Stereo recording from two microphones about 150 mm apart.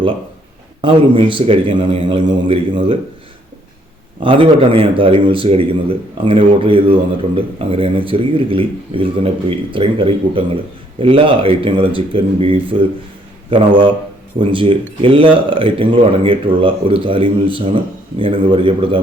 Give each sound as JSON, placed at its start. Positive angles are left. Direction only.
{"t": 0.8, "sound": "speech", "side_deg": -35}
{"t": 4.2, "sound": "speech", "side_deg": -35}